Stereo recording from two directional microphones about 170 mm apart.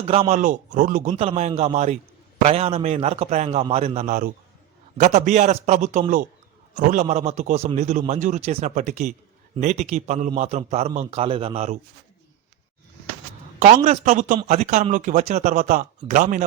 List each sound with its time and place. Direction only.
0.0 s a man's voice: 35° right (ahead or behind); by 1.1 s 50° right (ahead or behind)
1.1 s a man's voice: 35° right (ahead or behind)
13.6 s a man's voice: 45° right (ahead or behind)